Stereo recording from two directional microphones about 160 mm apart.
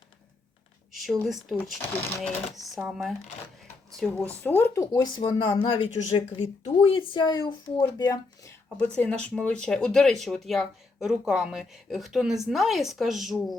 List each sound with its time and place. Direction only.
0.9 s speech: centre (ahead or behind)
4.3 s speech: 15° left (ahead or behind)
8.8 s speech: 10° left (ahead or behind)